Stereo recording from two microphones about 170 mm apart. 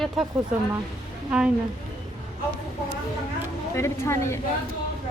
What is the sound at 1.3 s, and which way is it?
Speech, 5° right (ahead or behind).